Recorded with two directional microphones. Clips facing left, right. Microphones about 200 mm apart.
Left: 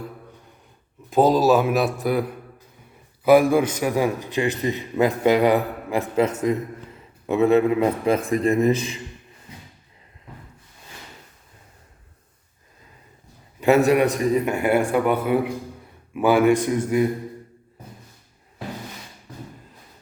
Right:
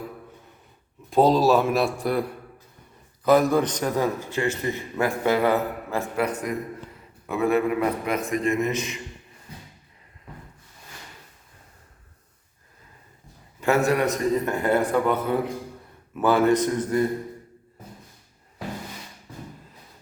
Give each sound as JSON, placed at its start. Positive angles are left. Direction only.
{"t": 1.1, "sound": "a man's voice", "side_deg": 0}
{"t": 13.6, "sound": "a man's voice", "side_deg": 15}